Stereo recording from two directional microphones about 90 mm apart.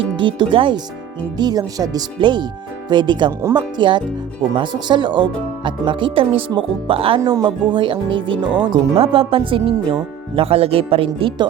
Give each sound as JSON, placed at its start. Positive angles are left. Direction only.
{"t": 0.2, "sound": "speech", "side_deg": -65}
{"t": 1.4, "sound": "speech", "side_deg": -50}
{"t": 2.1, "sound": "speech", "side_deg": -60}
{"t": 7.4, "sound": "speech", "side_deg": -65}
{"t": 10.3, "sound": "speech", "side_deg": -90}